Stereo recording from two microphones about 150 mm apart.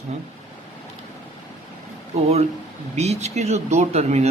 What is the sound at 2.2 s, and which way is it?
Speech, 45° right (ahead or behind).